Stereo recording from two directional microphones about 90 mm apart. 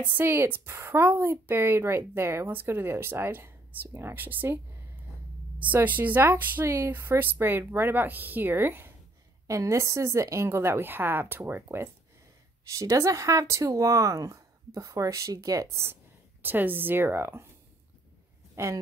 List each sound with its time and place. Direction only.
0.1 s a woman's voice: 25° right (ahead or behind)
5.6 s a woman's voice: 20° right (ahead or behind)
9.5 s a woman's voice: 35° right (ahead or behind)
12.6 s a woman's voice: 35° right (ahead or behind)
18.6 s a woman's voice: 30° right (ahead or behind)